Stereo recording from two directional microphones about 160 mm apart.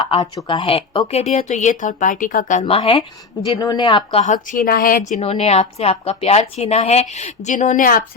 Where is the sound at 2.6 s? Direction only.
35° left (ahead or behind).